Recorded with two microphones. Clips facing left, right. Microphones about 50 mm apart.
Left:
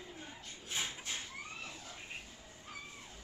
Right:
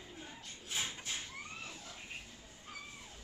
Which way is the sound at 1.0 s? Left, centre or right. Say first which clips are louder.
Even; centre.